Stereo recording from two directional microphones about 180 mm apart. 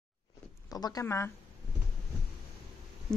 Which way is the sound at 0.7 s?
20° left (ahead or behind).